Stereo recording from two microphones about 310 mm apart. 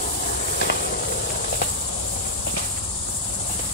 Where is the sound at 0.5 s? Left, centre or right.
Left.